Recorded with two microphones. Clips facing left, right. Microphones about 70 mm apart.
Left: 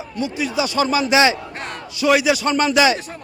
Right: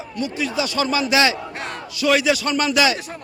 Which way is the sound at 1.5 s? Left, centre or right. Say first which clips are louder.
Even; centre.